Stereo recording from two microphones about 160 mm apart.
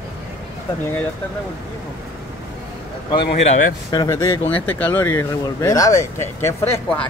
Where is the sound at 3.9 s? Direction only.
25° left (ahead or behind).